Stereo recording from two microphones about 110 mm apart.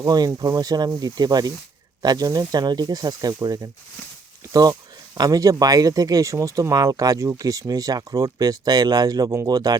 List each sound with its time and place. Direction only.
0.0 s speech: 35° right (ahead or behind)